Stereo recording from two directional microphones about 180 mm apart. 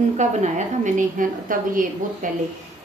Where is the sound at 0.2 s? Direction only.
40° right (ahead or behind).